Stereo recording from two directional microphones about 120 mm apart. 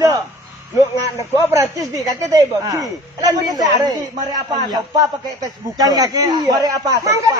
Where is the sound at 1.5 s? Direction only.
25° right (ahead or behind).